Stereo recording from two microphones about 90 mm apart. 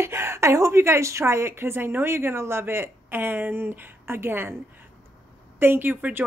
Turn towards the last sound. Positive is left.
turn(degrees=-20)  # may be behind; listen again after turning